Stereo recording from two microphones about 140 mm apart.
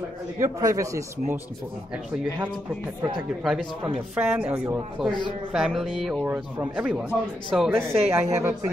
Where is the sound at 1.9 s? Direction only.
5° right (ahead or behind).